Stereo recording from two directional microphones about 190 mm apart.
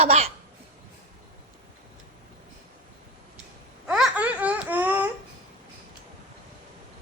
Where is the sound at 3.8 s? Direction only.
5° right (ahead or behind).